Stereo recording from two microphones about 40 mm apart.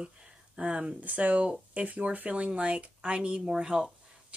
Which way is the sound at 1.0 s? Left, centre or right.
Right.